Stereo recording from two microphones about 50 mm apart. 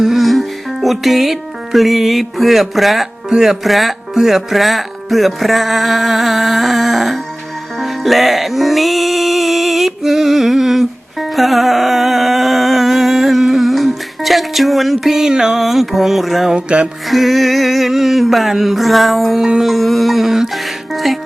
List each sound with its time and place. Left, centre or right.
0.0 s music: centre
3.3 s speech: centre
7.8 s music: centre
16.5 s music: right
17.1 s speech: centre
19.4 s music: centre
19.7 s a sound: centre
20.9 s music: centre